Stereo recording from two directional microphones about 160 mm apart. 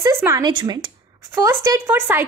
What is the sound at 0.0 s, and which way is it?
Speech, 20° right (ahead or behind).